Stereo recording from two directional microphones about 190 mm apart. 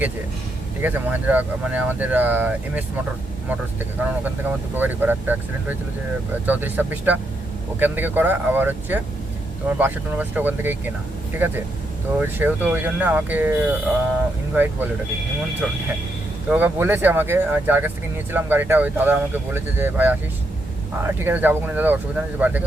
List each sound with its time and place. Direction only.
0.8 s speech: 10° right (ahead or behind)
16.5 s speech: 10° right (ahead or behind)